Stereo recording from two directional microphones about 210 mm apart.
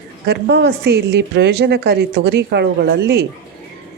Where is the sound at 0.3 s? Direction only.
55° right (ahead or behind).